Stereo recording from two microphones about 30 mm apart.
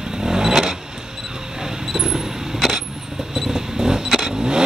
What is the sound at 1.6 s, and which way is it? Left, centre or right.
Vehicle, centre.